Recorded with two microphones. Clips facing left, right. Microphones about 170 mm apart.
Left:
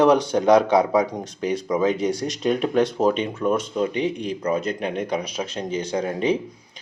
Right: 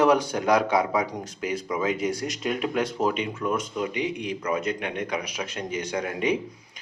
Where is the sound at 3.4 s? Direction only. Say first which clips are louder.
Left 5 dB; 30° left (ahead or behind).